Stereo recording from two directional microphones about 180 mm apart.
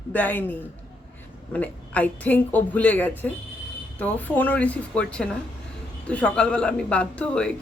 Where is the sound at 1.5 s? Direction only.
10° left (ahead or behind).